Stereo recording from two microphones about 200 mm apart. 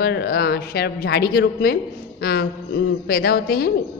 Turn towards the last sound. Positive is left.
turn(degrees=50)  # may be behind; listen again after turning